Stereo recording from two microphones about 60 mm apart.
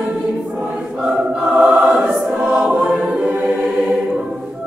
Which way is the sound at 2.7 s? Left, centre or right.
Right.